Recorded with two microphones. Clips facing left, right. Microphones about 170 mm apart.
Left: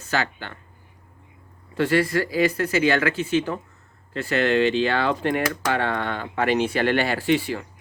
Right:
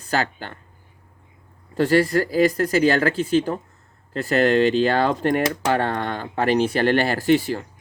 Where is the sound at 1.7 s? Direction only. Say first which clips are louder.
Right 3 dB; 40° right (ahead or behind).